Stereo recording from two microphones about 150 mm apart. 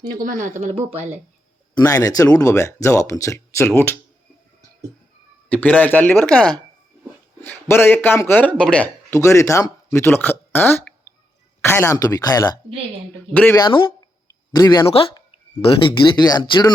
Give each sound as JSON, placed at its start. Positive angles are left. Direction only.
{"t": 0.2, "sound": "speech", "side_deg": -60}
{"t": 1.7, "sound": "speech", "side_deg": 25}
{"t": 5.5, "sound": "speech", "side_deg": 10}
{"t": 13.3, "sound": "speech", "side_deg": 10}
{"t": 13.6, "sound": "a sound", "side_deg": 30}
{"t": 15.1, "sound": "speech", "side_deg": 35}